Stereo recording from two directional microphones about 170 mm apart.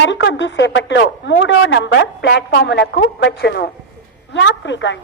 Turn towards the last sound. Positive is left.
turn(degrees=90)